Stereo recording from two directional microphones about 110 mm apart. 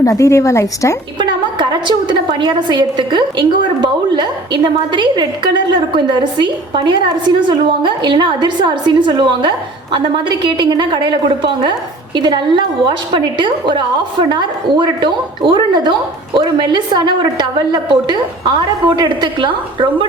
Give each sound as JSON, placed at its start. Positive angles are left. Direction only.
{"t": 0.0, "sound": "a woman's voice", "side_deg": 30}
{"t": 1.2, "sound": "a woman's voice", "side_deg": -45}